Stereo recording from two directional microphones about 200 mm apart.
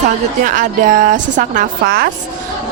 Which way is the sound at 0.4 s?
40° right (ahead or behind).